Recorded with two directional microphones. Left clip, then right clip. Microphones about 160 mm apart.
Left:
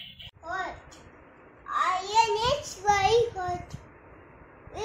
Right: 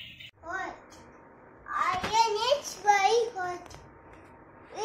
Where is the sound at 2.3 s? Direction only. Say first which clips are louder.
Even; 5° left (ahead or behind).